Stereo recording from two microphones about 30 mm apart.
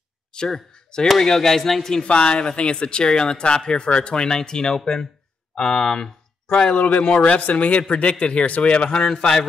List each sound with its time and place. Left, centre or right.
0.3 s a sound: left
1.2 s speech: centre
2.0 s speech: left; by 6.0 s centre
6.8 s a man's voice: left
7.2 s speech: left
7.5 s a man's voice: left